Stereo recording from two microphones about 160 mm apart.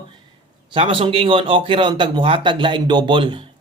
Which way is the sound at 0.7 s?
35° right (ahead or behind).